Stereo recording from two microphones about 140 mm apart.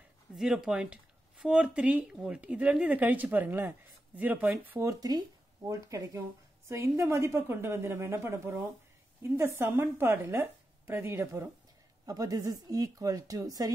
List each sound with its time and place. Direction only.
0.4 s speech: 5° right (ahead or behind)
4.8 s a woman's voice: 25° right (ahead or behind)